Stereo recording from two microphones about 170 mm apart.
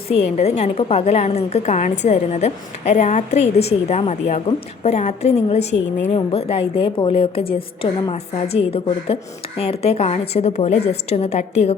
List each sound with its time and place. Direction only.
0.1 s a woman's voice: 40° left (ahead or behind)